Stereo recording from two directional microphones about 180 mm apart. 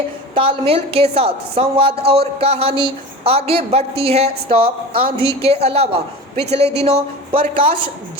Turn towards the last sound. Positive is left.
turn(degrees=-30)  # may be behind; listen again after turning